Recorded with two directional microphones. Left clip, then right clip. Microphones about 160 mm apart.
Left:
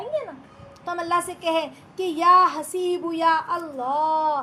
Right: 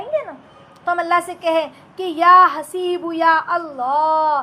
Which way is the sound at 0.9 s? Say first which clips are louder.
Right 7 dB; 20° right (ahead or behind).